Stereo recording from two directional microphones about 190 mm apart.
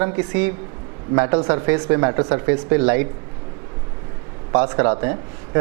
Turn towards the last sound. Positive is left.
turn(degrees=-20)  # may be behind; listen again after turning